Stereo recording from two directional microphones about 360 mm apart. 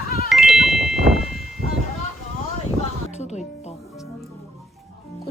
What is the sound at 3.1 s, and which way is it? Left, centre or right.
Speech, centre.